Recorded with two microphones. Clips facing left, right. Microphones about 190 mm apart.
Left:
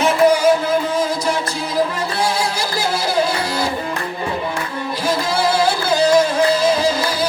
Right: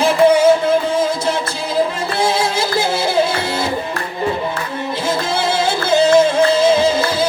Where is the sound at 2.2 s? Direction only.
25° right (ahead or behind).